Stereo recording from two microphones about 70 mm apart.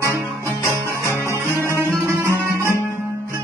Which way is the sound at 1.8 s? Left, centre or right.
Right.